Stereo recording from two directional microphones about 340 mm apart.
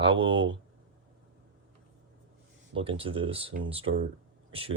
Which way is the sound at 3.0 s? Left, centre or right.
Centre.